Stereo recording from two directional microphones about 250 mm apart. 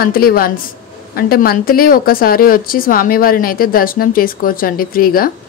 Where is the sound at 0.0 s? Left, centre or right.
Left.